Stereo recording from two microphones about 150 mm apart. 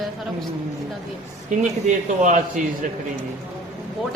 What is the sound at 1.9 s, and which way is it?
Speech, 60° right (ahead or behind).